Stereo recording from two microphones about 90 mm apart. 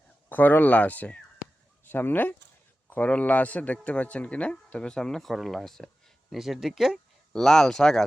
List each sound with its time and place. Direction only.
0.3 s speech: 20° left (ahead or behind); by 8.0 s 5° left (ahead or behind)